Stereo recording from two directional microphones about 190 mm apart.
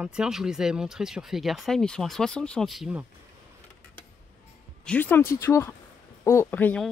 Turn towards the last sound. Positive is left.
turn(degrees=10)  # may be behind; listen again after turning